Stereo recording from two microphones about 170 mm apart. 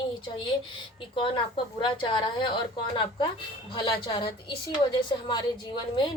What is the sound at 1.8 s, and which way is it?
Speech, 25° left (ahead or behind).